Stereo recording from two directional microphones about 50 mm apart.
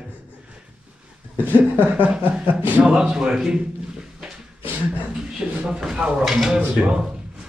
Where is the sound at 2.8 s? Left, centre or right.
Centre.